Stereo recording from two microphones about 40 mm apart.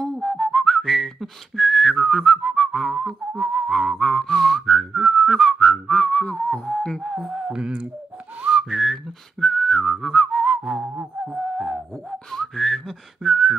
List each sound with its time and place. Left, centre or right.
0.0 s whistling: centre
5.9 s whistling: left
6.3 s music: left
7.0 s speech: centre
7.4 s a sound: right
8.4 s whistling: right
8.6 s whistling: centre
9.4 s whistling: centre
11.1 s music: centre
11.9 s whistling: centre